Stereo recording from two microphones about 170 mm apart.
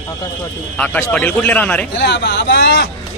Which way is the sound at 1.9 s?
90° left.